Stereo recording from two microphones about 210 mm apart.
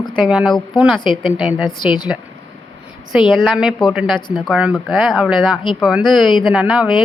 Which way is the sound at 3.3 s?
Centre (ahead or behind).